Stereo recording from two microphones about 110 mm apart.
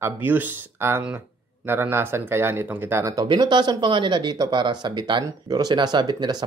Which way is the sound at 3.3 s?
45° right (ahead or behind).